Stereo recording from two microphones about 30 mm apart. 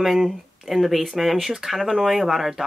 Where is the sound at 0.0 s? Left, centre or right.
Centre.